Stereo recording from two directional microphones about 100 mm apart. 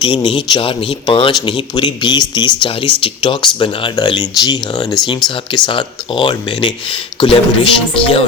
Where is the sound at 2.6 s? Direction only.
65° left (ahead or behind); by 5.0 s 40° left (ahead or behind).